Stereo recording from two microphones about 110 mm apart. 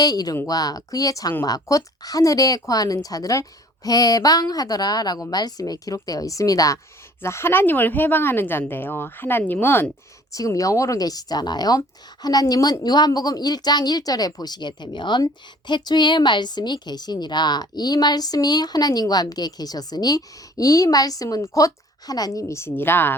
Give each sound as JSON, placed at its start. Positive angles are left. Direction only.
{"t": 0.0, "sound": "a woman's voice", "side_deg": 35}
{"t": 10.3, "sound": "a woman's voice", "side_deg": 30}